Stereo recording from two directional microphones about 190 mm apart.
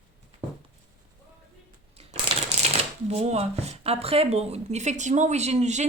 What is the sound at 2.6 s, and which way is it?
Shuffling cards, 35° right (ahead or behind).